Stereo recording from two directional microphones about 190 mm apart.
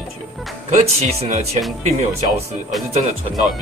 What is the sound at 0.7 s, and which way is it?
Speech, 40° right (ahead or behind).